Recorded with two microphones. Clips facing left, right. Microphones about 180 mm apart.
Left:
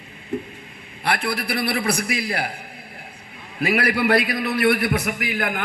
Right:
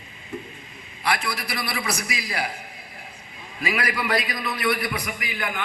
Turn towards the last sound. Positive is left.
turn(degrees=50)  # may be behind; listen again after turning